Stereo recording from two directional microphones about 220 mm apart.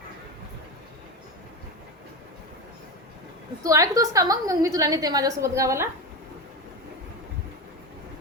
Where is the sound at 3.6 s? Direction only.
15° right (ahead or behind).